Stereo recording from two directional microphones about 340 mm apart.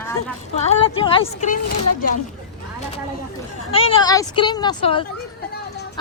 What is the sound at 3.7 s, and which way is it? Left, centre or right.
Speech, centre.